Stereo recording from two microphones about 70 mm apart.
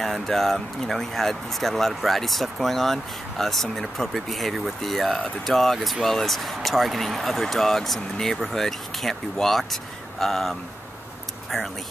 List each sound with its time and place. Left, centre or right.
0.0 s speech: centre